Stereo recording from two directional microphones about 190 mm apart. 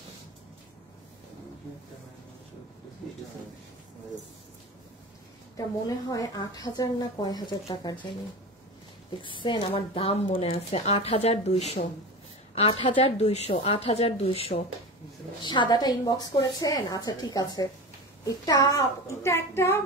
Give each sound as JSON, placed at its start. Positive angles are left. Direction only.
{"t": 5.9, "sound": "speech", "side_deg": 20}
{"t": 9.2, "sound": "a woman's voice", "side_deg": 25}